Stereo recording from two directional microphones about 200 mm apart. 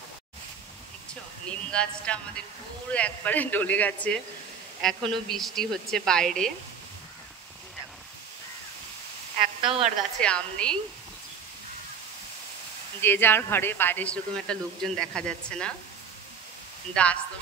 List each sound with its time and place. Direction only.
1.5 s a woman's voice: 5° left (ahead or behind)
9.6 s a woman's voice: 25° right (ahead or behind)
10.2 s a woman's voice: 5° left (ahead or behind)
13.0 s speech: 10° left (ahead or behind)
16.9 s speech: 5° left (ahead or behind)